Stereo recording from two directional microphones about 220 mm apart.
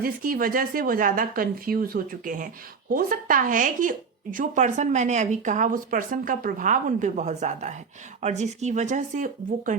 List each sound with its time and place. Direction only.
0.0 s speech: 40° right (ahead or behind)